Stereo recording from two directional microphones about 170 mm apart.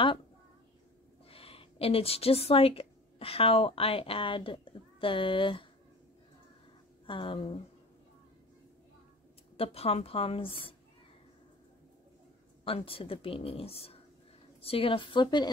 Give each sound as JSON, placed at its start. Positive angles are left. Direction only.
{"t": 1.3, "sound": "a woman's voice", "side_deg": 35}
{"t": 7.1, "sound": "a woman's voice", "side_deg": 30}
{"t": 9.6, "sound": "a woman's voice", "side_deg": 35}
{"t": 12.6, "sound": "a woman's voice", "side_deg": 35}